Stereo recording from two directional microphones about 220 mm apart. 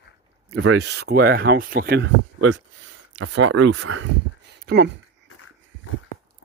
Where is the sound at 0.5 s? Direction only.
65° right (ahead or behind); by 2.1 s 45° right (ahead or behind).